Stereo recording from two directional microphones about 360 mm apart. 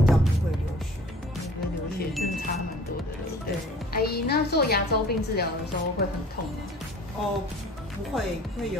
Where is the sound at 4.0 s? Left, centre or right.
Left.